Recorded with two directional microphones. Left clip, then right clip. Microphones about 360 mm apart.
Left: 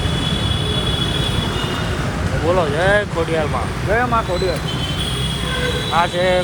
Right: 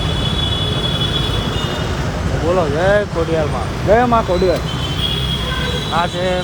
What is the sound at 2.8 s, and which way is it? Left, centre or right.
Speech, centre.